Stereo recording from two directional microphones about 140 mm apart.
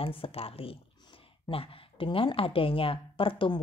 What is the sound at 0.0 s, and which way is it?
Speech, 40° left (ahead or behind).